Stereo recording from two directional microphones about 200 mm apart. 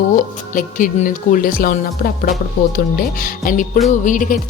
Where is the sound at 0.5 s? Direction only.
40° left (ahead or behind).